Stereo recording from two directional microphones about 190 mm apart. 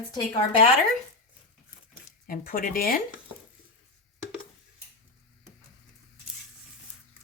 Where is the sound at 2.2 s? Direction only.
50° left (ahead or behind).